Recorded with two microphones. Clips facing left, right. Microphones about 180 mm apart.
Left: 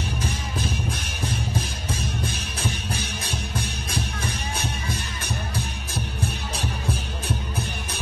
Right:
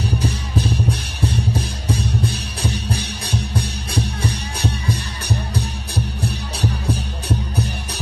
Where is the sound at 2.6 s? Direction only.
35° right (ahead or behind).